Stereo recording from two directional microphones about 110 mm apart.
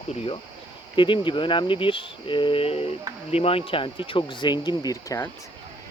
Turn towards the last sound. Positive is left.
turn(degrees=40)  # may be behind; listen again after turning